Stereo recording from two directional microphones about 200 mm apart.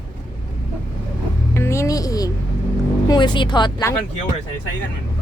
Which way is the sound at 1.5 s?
15° left (ahead or behind).